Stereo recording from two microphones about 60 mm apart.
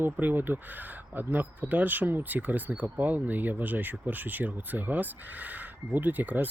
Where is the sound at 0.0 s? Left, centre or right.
Right.